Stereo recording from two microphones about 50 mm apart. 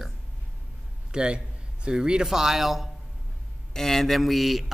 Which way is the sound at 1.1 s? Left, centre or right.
Centre.